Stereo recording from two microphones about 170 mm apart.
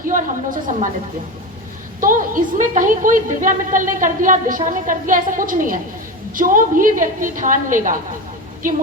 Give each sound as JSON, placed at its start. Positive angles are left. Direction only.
{"t": 0.0, "sound": "a woman's voice", "side_deg": -50}
{"t": 2.0, "sound": "a woman's voice", "side_deg": -50}